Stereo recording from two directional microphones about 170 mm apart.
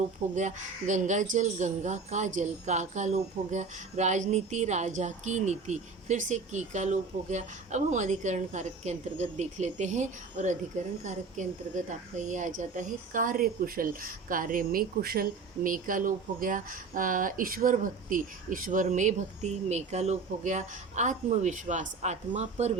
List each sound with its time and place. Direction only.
0.3 s speech: 45° right (ahead or behind)